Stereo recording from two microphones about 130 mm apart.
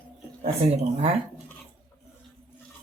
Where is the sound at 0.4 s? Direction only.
65° right (ahead or behind).